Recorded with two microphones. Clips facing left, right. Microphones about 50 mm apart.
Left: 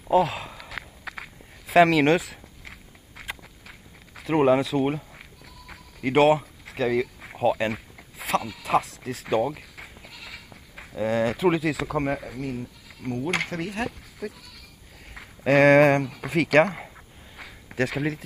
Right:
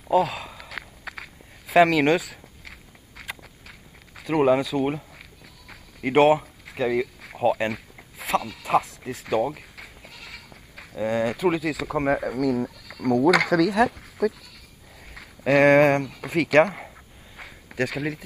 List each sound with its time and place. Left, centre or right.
0.1 s walk: centre
4.1 s speech: centre
7.2 s a sound: centre
11.0 s speech: centre
12.4 s speech: right
15.1 s speech: centre
17.4 s a sound: centre